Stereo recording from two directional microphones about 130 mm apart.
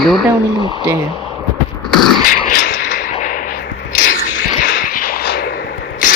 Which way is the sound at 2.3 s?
85° left.